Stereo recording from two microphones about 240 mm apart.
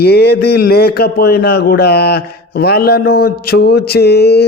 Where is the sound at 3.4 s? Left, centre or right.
Left.